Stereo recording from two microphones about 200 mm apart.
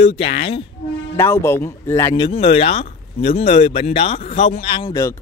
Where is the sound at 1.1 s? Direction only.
10° left (ahead or behind).